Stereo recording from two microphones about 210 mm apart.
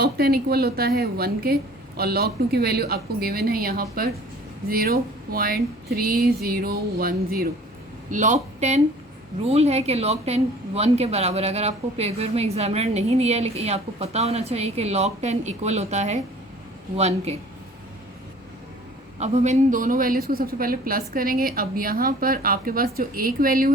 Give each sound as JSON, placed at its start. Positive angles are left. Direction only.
{"t": 0.0, "sound": "a woman's voice", "side_deg": -45}
{"t": 19.2, "sound": "a woman's voice", "side_deg": -30}